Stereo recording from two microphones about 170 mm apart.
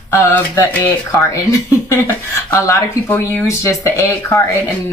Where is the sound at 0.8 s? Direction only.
20° left (ahead or behind).